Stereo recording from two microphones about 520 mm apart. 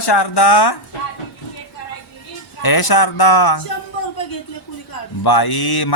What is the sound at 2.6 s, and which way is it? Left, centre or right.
A man's voice, left.